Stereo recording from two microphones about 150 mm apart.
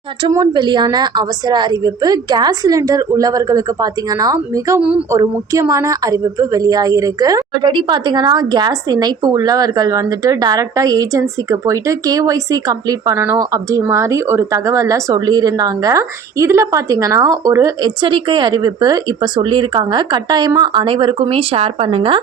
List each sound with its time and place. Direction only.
0.2 s a woman's voice: 25° right (ahead or behind)
4.8 s speech: 10° right (ahead or behind)
5.1 s a woman's voice: 20° right (ahead or behind)
18.0 s speech: 30° right (ahead or behind)